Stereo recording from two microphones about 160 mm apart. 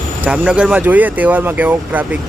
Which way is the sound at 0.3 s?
5° right (ahead or behind).